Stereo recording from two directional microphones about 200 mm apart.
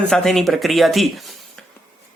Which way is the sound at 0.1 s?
Centre (ahead or behind).